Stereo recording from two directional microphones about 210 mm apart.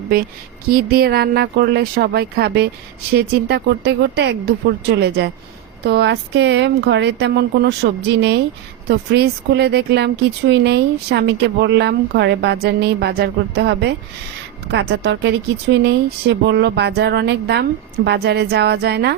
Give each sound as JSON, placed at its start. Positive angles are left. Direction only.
{"t": 0.7, "sound": "speech", "side_deg": -45}